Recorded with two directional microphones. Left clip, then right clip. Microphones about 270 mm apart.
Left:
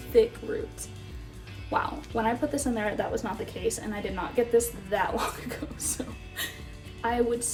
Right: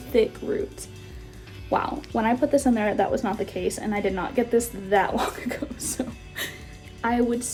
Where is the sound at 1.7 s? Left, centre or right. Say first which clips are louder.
Right 4 dB; right.